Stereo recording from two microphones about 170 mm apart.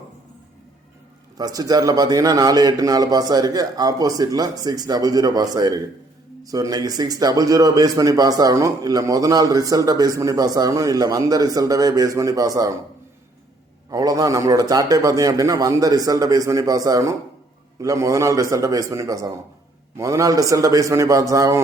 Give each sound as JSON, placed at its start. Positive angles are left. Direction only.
{"t": 1.4, "sound": "a man's voice", "side_deg": -20}
{"t": 13.9, "sound": "a man's voice", "side_deg": -20}